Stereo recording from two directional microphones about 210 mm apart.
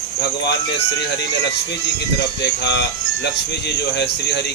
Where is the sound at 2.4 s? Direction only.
55° left (ahead or behind).